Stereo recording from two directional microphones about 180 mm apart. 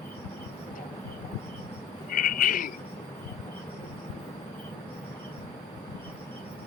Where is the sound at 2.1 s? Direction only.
50° left (ahead or behind).